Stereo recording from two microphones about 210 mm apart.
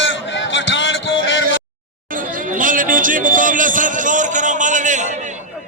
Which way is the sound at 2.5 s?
40° right (ahead or behind).